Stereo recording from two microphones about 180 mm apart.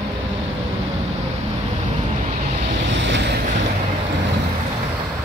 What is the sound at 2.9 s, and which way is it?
Vehicle, 80° right.